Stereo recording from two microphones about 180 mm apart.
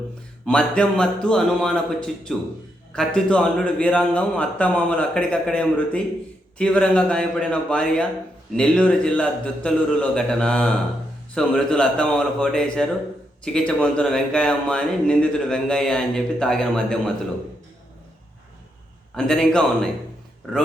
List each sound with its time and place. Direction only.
0.4 s speech: 5° left (ahead or behind)
19.1 s speech: 5° left (ahead or behind)